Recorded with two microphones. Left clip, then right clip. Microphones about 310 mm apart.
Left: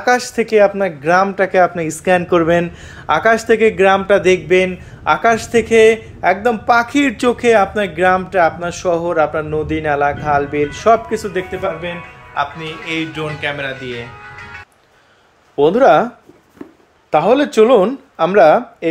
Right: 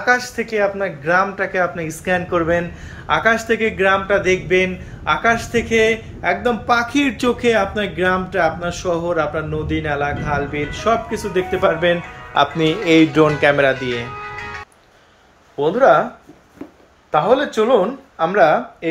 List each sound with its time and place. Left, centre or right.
0.0 s a man's voice: left
11.5 s speech: centre
12.4 s speech: right
15.6 s speech: left
17.1 s speech: left